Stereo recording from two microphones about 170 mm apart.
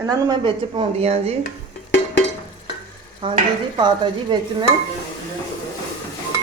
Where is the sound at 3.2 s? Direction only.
30° right (ahead or behind).